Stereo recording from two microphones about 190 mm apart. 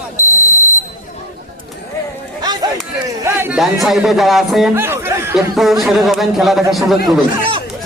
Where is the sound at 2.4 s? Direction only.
20° right (ahead or behind).